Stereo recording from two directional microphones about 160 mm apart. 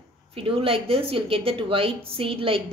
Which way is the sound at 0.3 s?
35° right (ahead or behind).